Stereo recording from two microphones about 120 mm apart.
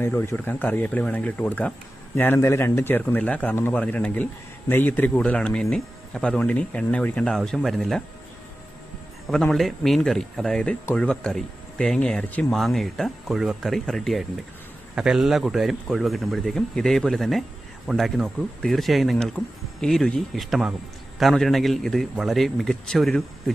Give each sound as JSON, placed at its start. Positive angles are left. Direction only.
{"t": 0.0, "sound": "speech", "side_deg": 20}
{"t": 9.2, "sound": "speech", "side_deg": 5}